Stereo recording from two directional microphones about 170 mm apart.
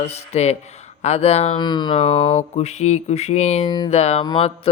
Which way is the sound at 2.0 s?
40° left (ahead or behind).